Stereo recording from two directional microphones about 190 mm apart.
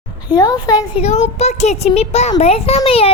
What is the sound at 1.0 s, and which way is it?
A child's voice, 35° left (ahead or behind).